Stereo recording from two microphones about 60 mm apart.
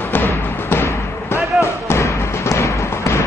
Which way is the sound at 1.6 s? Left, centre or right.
Left.